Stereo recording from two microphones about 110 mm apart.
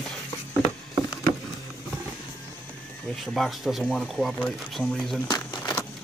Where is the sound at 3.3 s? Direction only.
Centre (ahead or behind).